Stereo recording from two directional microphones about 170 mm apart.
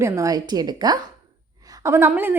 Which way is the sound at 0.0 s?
20° right (ahead or behind).